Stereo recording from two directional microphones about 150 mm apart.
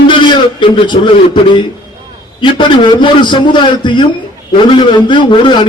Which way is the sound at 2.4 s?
30° left (ahead or behind).